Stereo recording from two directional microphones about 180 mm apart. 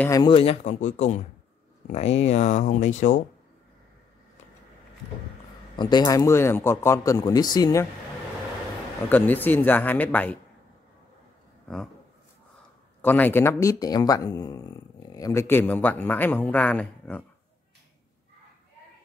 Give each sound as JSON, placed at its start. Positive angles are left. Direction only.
{"t": 0.0, "sound": "speech", "side_deg": 20}
{"t": 0.3, "sound": "speech", "side_deg": 30}
{"t": 5.8, "sound": "speech", "side_deg": 25}
{"t": 9.1, "sound": "speech", "side_deg": 10}
{"t": 11.6, "sound": "speech", "side_deg": 5}
{"t": 13.0, "sound": "speech", "side_deg": 10}